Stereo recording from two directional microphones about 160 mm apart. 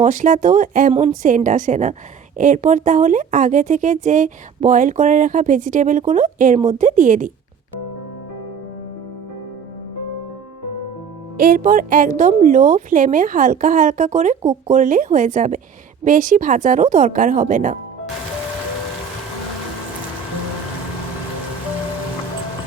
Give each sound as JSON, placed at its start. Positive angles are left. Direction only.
{"t": 0.0, "sound": "speech", "side_deg": -55}
{"t": 11.3, "sound": "a woman's voice", "side_deg": -60}